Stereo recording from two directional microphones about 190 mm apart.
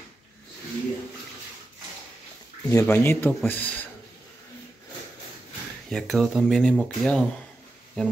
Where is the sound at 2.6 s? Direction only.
15° left (ahead or behind).